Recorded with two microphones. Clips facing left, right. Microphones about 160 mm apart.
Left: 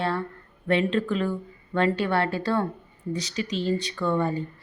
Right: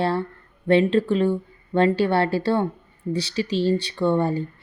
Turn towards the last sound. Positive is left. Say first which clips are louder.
# right 4 dB
turn(degrees=-30)  # may be behind; listen again after turning